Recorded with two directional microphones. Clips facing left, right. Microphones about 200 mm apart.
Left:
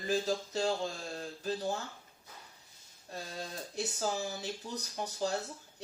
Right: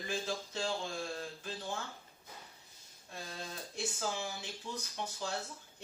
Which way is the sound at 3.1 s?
40° left (ahead or behind).